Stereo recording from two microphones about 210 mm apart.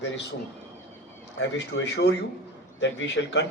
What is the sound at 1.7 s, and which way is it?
A man's voice, 55° left (ahead or behind).